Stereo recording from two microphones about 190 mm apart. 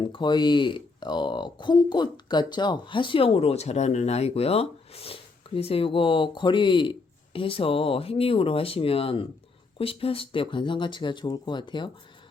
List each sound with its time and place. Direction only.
0.0 s speech: 25° left (ahead or behind)